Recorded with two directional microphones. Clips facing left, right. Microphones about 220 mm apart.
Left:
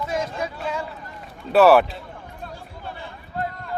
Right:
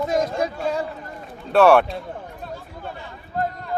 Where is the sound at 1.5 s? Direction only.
Centre (ahead or behind).